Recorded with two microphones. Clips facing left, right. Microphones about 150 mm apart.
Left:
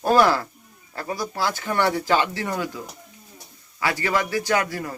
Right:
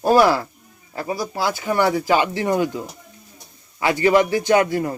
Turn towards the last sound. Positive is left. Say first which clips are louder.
# right 7 dB
turn(degrees=-25)  # may be behind; listen again after turning